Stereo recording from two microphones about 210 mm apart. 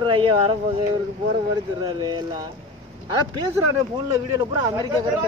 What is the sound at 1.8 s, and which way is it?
Speech, 20° right (ahead or behind).